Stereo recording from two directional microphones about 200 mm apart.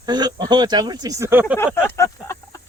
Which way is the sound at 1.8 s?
15° left (ahead or behind).